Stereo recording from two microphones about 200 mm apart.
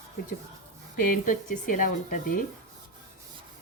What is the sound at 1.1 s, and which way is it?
Speech, 40° left (ahead or behind).